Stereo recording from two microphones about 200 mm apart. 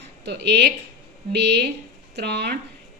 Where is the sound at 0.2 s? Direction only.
55° right (ahead or behind).